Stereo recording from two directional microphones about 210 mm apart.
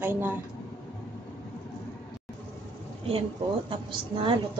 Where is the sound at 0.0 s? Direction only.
10° right (ahead or behind).